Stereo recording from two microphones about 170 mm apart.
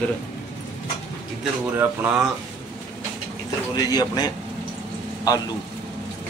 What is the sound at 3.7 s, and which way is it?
Speech, 25° left (ahead or behind).